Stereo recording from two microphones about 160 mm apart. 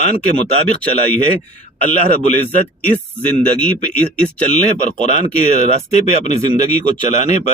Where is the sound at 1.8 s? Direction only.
50° left (ahead or behind).